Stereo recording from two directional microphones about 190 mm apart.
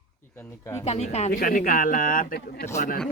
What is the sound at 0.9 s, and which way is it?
Speech, 35° left (ahead or behind).